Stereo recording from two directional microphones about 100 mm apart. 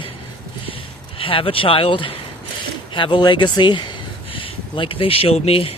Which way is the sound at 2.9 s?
55° left (ahead or behind).